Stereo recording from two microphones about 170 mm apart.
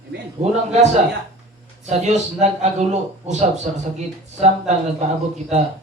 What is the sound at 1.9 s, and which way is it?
A man's voice, 40° right (ahead or behind).